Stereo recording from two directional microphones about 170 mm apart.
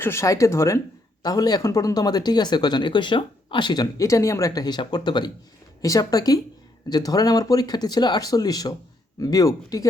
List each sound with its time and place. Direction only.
0.0 s speech: 15° left (ahead or behind)